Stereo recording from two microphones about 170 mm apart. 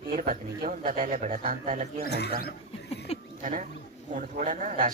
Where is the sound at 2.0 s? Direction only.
75° left (ahead or behind).